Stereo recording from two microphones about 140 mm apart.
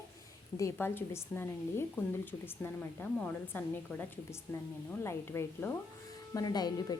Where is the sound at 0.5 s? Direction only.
20° left (ahead or behind).